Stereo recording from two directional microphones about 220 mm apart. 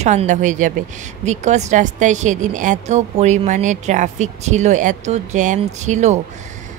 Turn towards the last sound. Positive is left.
turn(degrees=-30)  # may be behind; listen again after turning